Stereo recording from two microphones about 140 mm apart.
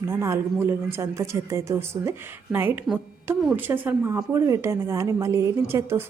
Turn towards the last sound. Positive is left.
turn(degrees=-15)  # may be behind; listen again after turning